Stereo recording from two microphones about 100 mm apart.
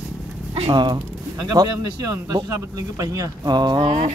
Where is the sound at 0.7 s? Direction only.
45° right (ahead or behind).